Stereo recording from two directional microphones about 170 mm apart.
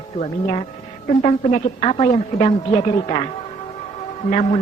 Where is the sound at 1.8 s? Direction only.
35° left (ahead or behind).